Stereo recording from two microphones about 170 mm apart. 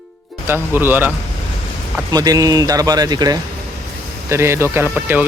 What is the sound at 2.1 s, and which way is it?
A man's voice, 20° right (ahead or behind).